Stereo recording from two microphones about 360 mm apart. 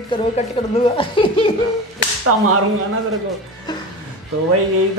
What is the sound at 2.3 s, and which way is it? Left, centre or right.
Whip, right.